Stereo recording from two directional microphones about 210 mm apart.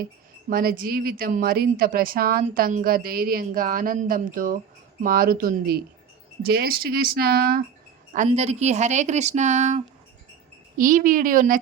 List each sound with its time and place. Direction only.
0.5 s a woman's voice: 45° right (ahead or behind)
8.3 s a woman's voice: 30° right (ahead or behind)